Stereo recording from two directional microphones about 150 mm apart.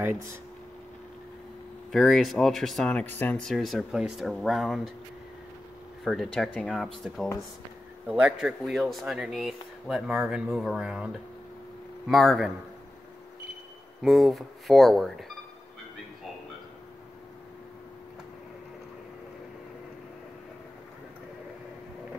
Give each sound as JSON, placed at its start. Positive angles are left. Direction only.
{"t": 0.0, "sound": "speech", "side_deg": -15}
{"t": 1.9, "sound": "speech", "side_deg": 0}
{"t": 6.0, "sound": "speech", "side_deg": 0}
{"t": 8.1, "sound": "speech", "side_deg": -5}
{"t": 14.0, "sound": "speech", "side_deg": 0}